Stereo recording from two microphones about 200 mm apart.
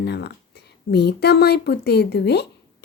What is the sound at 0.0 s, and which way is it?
A woman's voice, 55° left (ahead or behind).